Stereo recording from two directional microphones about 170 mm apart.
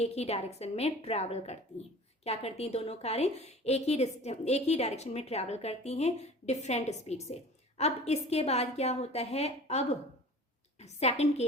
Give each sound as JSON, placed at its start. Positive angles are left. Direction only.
{"t": 0.0, "sound": "a woman's voice", "side_deg": 40}